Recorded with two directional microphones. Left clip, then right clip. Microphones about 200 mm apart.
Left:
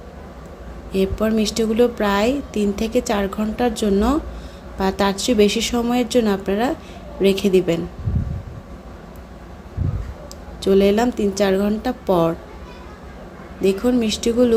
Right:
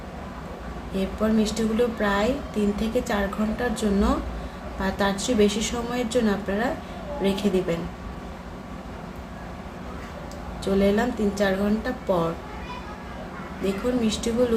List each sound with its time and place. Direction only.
0.9 s a woman's voice: 40° left (ahead or behind)
10.6 s a woman's voice: 40° left (ahead or behind)
14.0 s a woman's voice: 40° left (ahead or behind)